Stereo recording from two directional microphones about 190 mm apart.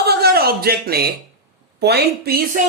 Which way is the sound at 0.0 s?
55° right (ahead or behind).